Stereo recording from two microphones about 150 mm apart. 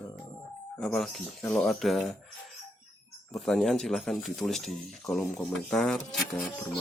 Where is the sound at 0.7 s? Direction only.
5° left (ahead or behind).